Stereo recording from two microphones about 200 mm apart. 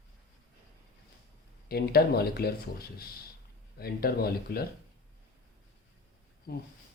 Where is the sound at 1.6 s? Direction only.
50° left (ahead or behind).